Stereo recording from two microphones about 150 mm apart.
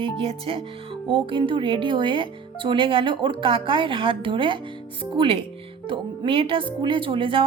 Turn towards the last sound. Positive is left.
turn(degrees=-35)  # may be behind; listen again after turning